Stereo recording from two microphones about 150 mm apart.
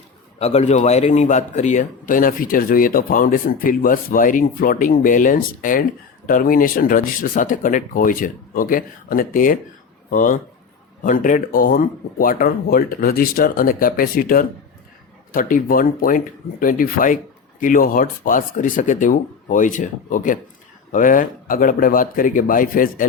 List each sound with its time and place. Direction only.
0.3 s a man's voice: 45° left (ahead or behind); by 23.0 s 65° left (ahead or behind)